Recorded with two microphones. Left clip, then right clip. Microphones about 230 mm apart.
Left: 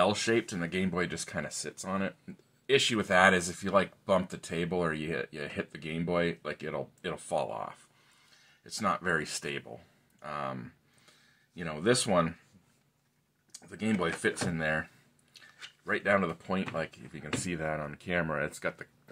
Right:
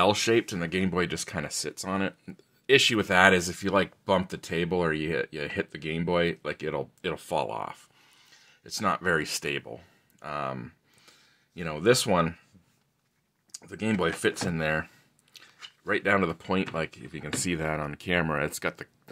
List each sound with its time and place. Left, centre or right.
0.0 s speech: right
13.5 s speech: right